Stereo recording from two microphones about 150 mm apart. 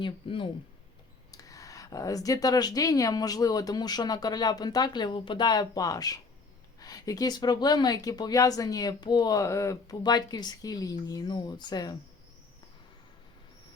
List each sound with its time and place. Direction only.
0.0 s speech: 35° left (ahead or behind)
1.3 s speech: 25° left (ahead or behind)